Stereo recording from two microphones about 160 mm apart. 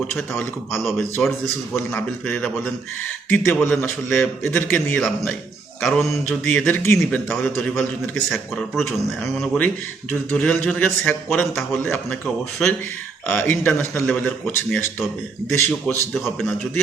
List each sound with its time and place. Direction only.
1.2 s a man's voice: 5° left (ahead or behind)
10.1 s a man's voice: 10° left (ahead or behind)